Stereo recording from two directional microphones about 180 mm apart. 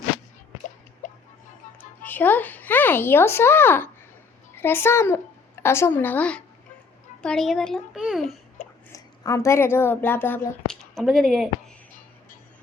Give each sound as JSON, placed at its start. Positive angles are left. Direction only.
{"t": 1.0, "sound": "a sound", "side_deg": 45}
{"t": 2.0, "sound": "a woman's voice", "side_deg": 10}
{"t": 8.9, "sound": "a woman's voice", "side_deg": 20}
{"t": 10.9, "sound": "a child's voice", "side_deg": 0}